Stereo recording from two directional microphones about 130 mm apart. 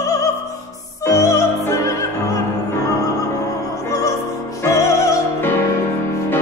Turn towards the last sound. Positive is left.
turn(degrees=25)  # may be behind; listen again after turning